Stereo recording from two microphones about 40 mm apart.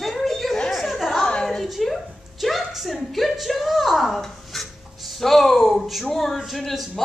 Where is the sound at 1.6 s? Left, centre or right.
Centre.